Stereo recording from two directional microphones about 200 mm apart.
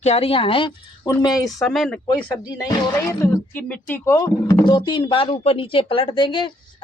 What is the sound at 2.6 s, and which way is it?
Speech, 15° left (ahead or behind).